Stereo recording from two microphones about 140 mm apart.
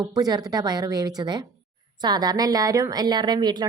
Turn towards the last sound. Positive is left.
turn(degrees=-30)  # may be behind; listen again after turning